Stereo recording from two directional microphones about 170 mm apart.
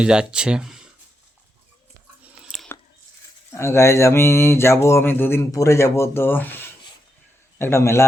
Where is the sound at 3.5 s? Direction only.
15° left (ahead or behind).